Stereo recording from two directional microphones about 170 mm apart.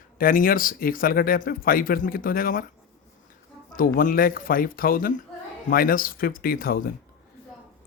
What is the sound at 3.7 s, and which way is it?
Speech, 55° left (ahead or behind).